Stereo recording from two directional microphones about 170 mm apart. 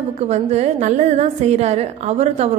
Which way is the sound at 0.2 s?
40° right (ahead or behind).